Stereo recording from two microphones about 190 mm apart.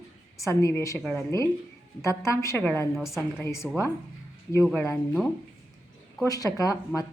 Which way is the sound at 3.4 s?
15° left (ahead or behind).